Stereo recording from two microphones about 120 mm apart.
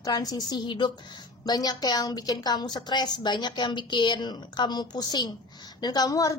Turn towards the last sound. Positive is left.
turn(degrees=30)  # may be behind; listen again after turning